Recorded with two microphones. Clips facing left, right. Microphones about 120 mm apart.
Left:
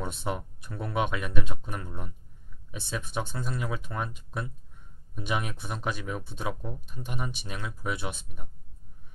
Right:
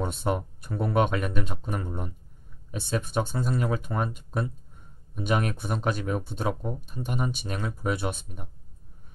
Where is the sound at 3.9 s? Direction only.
25° right (ahead or behind).